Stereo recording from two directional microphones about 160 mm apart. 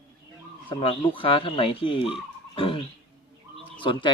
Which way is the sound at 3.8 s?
30° left (ahead or behind).